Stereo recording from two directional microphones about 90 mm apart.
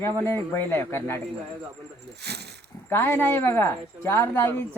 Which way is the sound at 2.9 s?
25° left (ahead or behind).